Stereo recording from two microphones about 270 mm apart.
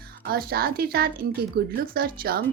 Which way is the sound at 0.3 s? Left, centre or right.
Right.